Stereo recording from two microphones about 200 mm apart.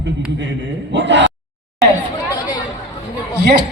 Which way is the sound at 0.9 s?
60° right (ahead or behind).